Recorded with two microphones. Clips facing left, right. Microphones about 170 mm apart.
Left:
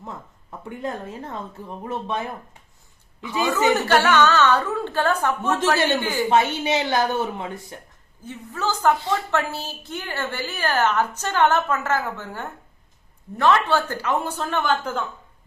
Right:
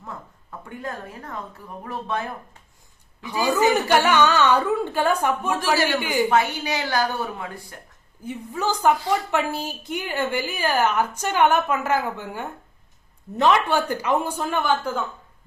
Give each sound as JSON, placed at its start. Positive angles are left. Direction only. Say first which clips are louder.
{"t": 0.6, "sound": "speech", "louder": "left 4 dB", "side_deg": 25}
{"t": 3.8, "sound": "a woman's voice", "louder": "even", "side_deg": -15}
{"t": 5.7, "sound": "speech", "louder": "right 3 dB", "side_deg": 20}
{"t": 6.0, "sound": "a woman's voice", "louder": "right 1 dB", "side_deg": -15}
{"t": 6.2, "sound": "speech", "louder": "left 1 dB", "side_deg": 25}
{"t": 8.2, "sound": "a woman's voice", "louder": "right 2 dB", "side_deg": -15}